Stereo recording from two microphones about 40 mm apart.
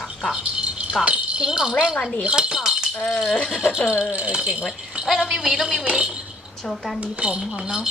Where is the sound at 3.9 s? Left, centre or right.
Right.